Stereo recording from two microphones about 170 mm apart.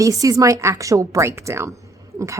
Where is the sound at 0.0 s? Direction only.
20° right (ahead or behind).